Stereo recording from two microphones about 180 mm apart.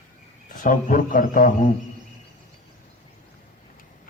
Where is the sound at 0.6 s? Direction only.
50° left (ahead or behind).